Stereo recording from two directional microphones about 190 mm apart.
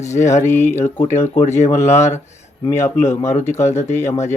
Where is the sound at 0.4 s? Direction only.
15° left (ahead or behind).